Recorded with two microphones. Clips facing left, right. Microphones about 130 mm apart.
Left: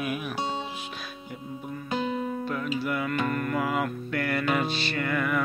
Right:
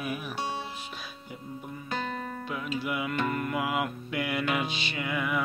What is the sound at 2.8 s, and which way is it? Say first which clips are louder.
Music: left 1 dB; 10° right (ahead or behind).